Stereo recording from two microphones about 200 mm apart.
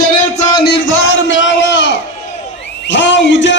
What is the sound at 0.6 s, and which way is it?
A man's voice, 60° left (ahead or behind).